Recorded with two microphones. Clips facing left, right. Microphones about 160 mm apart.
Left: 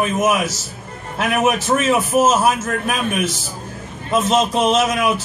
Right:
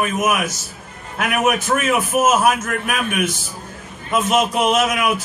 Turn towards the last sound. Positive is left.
turn(degrees=30)  # may be behind; listen again after turning